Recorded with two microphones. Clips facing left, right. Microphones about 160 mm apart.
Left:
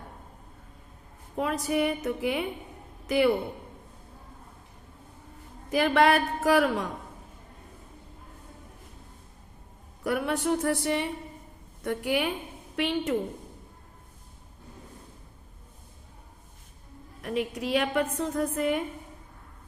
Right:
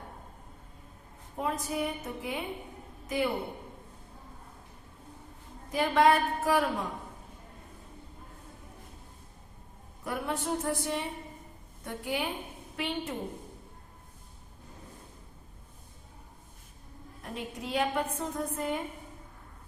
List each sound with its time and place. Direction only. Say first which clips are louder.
1.4 s a woman's voice: left 5 dB; 75° left (ahead or behind)
5.7 s a woman's voice: left 2 dB; 75° left (ahead or behind)
10.0 s a woman's voice: left 6 dB; 75° left (ahead or behind)
17.2 s a woman's voice: left 9 dB; 80° left